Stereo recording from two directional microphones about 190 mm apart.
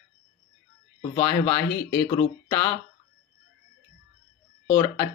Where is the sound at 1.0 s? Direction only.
15° left (ahead or behind).